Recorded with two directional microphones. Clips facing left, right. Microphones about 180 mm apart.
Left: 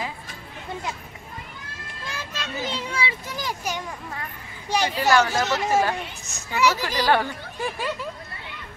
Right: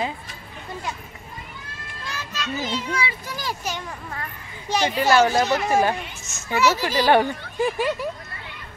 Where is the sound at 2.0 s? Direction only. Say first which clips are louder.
Right 2 dB; 30° left (ahead or behind).